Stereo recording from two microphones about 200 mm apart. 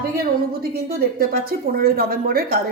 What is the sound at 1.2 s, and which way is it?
A woman's voice, 50° right (ahead or behind).